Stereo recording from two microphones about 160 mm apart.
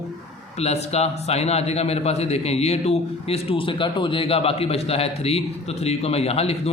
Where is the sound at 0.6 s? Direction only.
40° left (ahead or behind).